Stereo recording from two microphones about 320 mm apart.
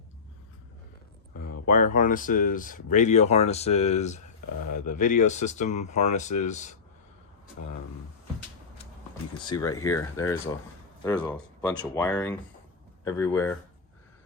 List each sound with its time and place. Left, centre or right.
1.6 s speech: left
9.5 s speech: centre